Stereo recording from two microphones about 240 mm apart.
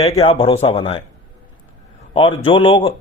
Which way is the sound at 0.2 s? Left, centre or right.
Left.